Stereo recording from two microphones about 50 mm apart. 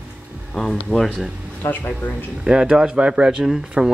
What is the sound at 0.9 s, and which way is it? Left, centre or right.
Speech, right.